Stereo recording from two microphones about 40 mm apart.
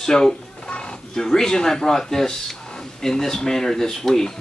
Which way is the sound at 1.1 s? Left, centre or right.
Centre.